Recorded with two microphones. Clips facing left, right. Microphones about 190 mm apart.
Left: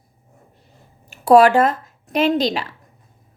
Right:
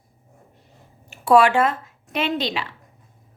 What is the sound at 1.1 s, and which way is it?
Speech, 40° left (ahead or behind).